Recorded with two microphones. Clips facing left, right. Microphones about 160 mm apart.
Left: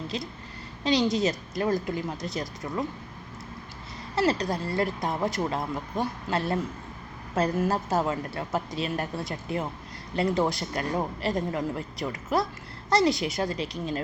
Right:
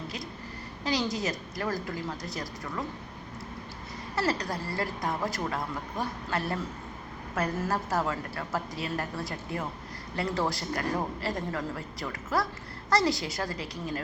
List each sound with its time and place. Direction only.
0.1 s a woman's voice: 25° left (ahead or behind)
4.1 s a woman's voice: 20° left (ahead or behind)